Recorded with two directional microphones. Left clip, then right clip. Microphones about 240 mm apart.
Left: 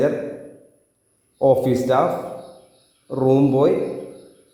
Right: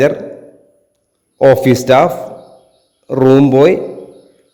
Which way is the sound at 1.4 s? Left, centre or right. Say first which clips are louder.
Right 8 dB; right.